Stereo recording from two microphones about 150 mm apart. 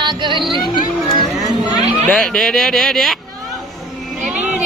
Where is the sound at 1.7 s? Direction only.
50° right (ahead or behind).